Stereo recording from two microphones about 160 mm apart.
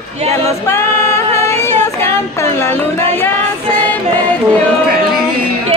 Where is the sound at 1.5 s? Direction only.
15° left (ahead or behind).